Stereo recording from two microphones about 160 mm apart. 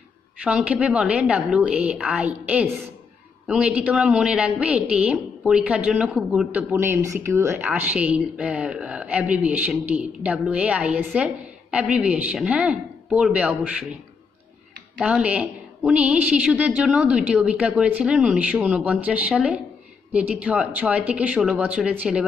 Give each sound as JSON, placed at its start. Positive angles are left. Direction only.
{"t": 0.4, "sound": "a woman's voice", "side_deg": -5}
{"t": 15.0, "sound": "a woman's voice", "side_deg": -5}